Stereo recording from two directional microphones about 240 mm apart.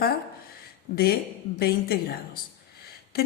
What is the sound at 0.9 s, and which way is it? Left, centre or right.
Speech, left.